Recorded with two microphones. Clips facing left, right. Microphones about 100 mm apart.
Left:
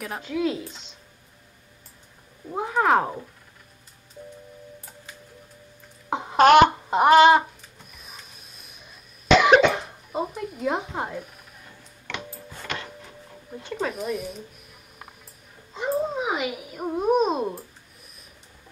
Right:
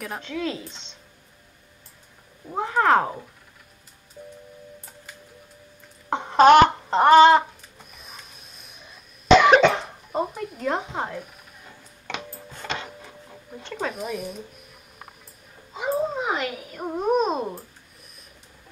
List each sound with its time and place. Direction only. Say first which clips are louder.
0.0 s speech: left 3 dB; 5° left (ahead or behind)
2.5 s speech: right 1 dB; 5° left (ahead or behind)
6.0 s a sound: right 2 dB; 5° left (ahead or behind)
7.9 s cough: right 1 dB; centre (ahead or behind)
11.0 s speech: right 1 dB; 5° left (ahead or behind)
12.6 s a sound: right 2 dB; 25° right (ahead or behind)
13.7 s speech: left 1 dB; centre (ahead or behind)